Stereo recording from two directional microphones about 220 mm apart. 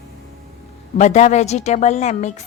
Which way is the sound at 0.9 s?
30° left (ahead or behind).